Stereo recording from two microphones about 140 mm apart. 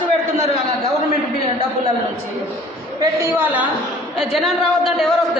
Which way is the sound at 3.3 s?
10° right (ahead or behind).